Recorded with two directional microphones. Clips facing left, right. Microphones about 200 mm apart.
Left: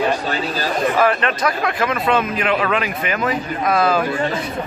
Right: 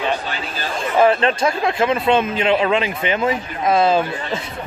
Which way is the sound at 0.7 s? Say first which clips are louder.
Right 3 dB; 25° right (ahead or behind).